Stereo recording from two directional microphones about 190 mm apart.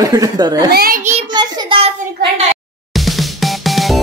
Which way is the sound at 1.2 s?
20° right (ahead or behind).